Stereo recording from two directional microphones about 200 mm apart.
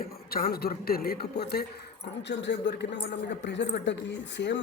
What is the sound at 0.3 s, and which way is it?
Speech, 50° left (ahead or behind).